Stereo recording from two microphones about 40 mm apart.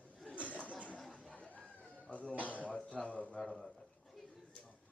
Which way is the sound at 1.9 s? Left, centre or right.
Left.